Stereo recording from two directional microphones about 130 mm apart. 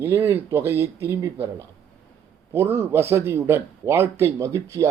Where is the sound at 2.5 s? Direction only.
20° right (ahead or behind).